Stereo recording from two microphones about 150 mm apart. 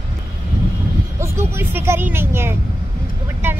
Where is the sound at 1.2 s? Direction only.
15° right (ahead or behind).